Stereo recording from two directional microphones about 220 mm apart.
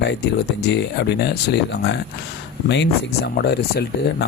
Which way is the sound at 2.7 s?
50° left (ahead or behind).